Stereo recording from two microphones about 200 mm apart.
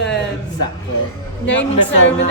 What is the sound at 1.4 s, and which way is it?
Speech, 65° left (ahead or behind).